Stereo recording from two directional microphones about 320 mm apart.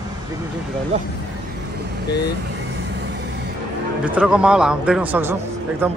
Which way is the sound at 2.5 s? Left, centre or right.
Right.